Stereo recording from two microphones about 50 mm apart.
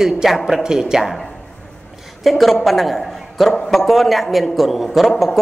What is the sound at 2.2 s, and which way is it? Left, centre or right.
A man's voice, centre.